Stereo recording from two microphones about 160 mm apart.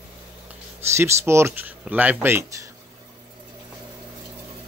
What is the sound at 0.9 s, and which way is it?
Speech, 15° right (ahead or behind).